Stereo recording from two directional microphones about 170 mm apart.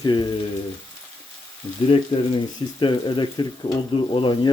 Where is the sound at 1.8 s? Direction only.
30° left (ahead or behind).